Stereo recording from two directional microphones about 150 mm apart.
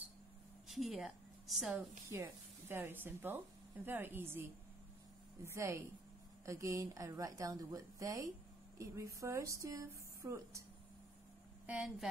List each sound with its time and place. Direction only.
0.7 s a woman's voice: centre (ahead or behind)
2.1 s a woman's voice: 15° right (ahead or behind)
11.6 s speech: 5° right (ahead or behind)